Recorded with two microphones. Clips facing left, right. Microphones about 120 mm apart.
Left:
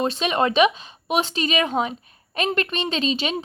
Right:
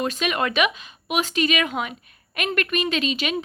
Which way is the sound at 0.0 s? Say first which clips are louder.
Left 3 dB; 30° left (ahead or behind).